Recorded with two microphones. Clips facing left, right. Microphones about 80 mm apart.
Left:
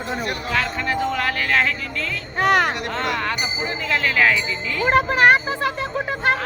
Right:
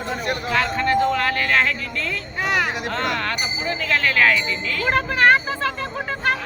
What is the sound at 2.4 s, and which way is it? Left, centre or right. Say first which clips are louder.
Speech: left 5 dB; left.